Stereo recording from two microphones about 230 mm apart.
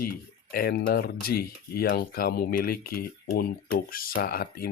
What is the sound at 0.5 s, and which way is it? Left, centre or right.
Speech, left.